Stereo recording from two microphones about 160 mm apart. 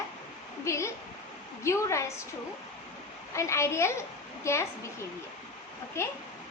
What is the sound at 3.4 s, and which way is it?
A woman's voice, 15° left (ahead or behind).